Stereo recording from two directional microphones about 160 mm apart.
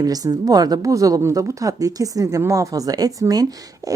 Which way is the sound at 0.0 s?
25° right (ahead or behind).